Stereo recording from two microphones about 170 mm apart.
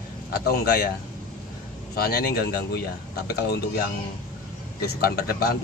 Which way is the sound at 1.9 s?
65° left (ahead or behind).